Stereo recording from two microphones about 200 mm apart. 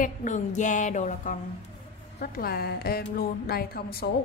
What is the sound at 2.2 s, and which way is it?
A woman's voice, 50° left (ahead or behind).